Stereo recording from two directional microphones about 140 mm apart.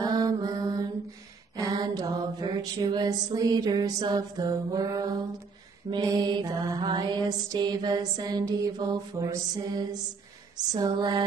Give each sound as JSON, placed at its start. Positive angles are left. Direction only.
{"t": 0.0, "sound": "mantra", "side_deg": -25}